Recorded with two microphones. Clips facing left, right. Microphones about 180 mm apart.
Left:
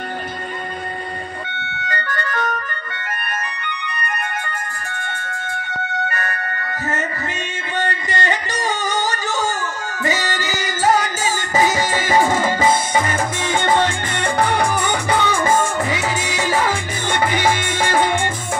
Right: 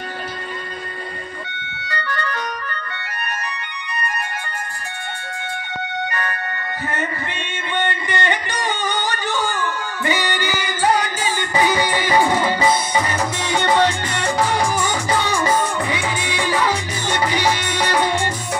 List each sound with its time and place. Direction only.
1.9 s music: 50° left (ahead or behind)
6.0 s music: 45° left (ahead or behind)
7.7 s music: 40° left (ahead or behind)